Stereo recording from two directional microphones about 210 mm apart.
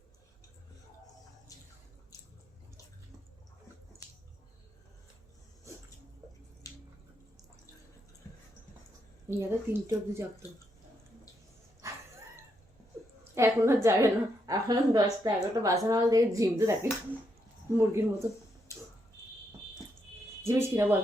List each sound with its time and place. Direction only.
6.6 s drip: 15° left (ahead or behind)
9.4 s a woman's voice: 10° right (ahead or behind)
13.3 s a sound: 15° right (ahead or behind)
13.8 s a woman's voice: 15° right (ahead or behind)
18.7 s a sound: 15° left (ahead or behind)
20.4 s a woman's voice: 10° right (ahead or behind)